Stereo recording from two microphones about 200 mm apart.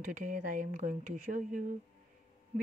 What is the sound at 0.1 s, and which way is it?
A woman's voice, 40° right (ahead or behind).